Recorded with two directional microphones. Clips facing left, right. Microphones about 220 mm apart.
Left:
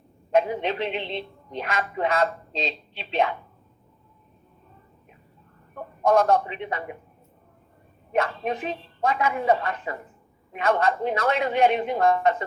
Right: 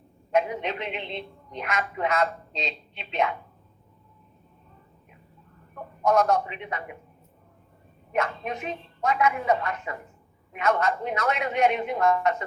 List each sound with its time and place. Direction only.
0.3 s a woman's voice: 30° left (ahead or behind)
6.1 s a woman's voice: 30° left (ahead or behind)
8.1 s a woman's voice: 30° left (ahead or behind)